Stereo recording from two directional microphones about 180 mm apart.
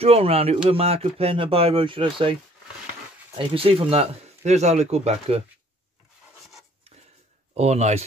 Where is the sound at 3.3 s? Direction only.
30° right (ahead or behind).